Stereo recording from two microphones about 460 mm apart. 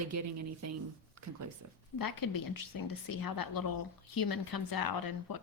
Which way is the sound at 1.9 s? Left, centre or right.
Left.